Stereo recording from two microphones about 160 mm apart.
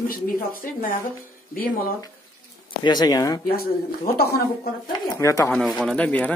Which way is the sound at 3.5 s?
70° left (ahead or behind).